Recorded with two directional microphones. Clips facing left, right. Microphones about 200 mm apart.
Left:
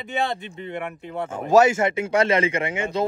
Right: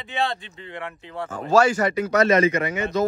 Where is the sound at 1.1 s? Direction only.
20° left (ahead or behind).